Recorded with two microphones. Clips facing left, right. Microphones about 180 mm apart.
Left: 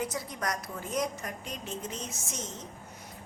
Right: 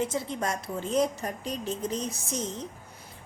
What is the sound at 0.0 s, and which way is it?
A woman's voice, 25° right (ahead or behind).